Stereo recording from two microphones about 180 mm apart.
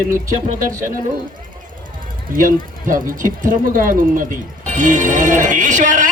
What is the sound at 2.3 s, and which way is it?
Speech, 50° right (ahead or behind).